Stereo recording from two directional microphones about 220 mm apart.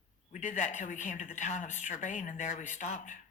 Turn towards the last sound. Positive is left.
turn(degrees=35)  # may be behind; listen again after turning